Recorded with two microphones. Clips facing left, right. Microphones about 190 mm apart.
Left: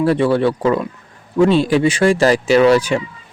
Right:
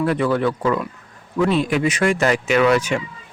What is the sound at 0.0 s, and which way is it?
Speech, 30° left (ahead or behind).